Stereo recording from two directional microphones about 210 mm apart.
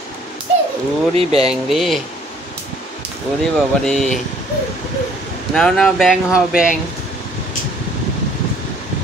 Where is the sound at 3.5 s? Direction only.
Centre (ahead or behind).